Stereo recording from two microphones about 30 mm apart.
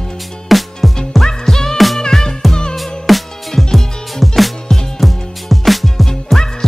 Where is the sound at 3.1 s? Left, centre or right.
Centre.